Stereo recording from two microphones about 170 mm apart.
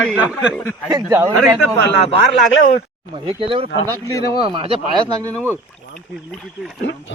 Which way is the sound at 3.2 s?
30° right (ahead or behind).